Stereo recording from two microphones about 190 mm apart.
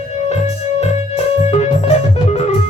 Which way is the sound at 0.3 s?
35° left (ahead or behind).